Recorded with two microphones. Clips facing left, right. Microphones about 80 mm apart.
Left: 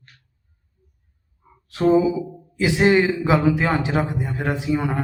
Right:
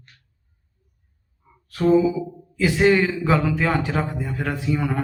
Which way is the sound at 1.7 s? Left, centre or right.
Left.